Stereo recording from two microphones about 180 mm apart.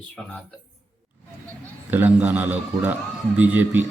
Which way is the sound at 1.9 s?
10° right (ahead or behind).